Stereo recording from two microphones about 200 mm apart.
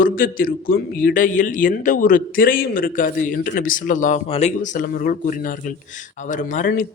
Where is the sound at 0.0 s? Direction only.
45° left (ahead or behind).